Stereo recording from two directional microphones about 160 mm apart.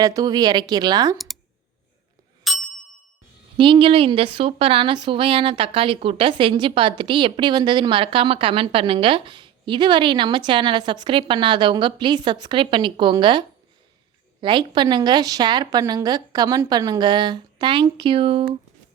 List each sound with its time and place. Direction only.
0.0 s a woman's voice: 25° right (ahead or behind)
2.4 s ding: centre (ahead or behind)
3.6 s a woman's voice: 35° right (ahead or behind)
14.4 s a woman's voice: 30° right (ahead or behind)